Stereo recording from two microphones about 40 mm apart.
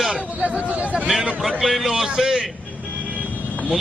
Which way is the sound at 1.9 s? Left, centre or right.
Centre.